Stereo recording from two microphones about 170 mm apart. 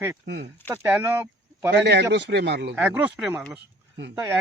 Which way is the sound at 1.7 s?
80° right.